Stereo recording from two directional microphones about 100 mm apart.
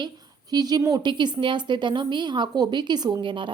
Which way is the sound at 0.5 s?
40° right (ahead or behind).